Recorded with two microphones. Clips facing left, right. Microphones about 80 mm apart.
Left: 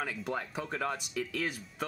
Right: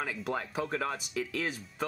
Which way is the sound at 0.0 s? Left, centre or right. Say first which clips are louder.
Right 1 dB; centre.